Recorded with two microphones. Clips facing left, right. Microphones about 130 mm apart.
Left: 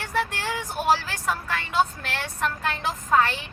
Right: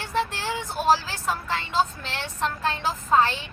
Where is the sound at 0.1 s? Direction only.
25° right (ahead or behind).